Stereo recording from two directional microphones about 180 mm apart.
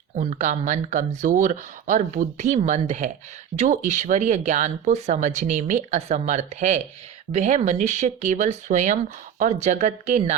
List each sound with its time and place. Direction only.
0.2 s speech: 40° right (ahead or behind)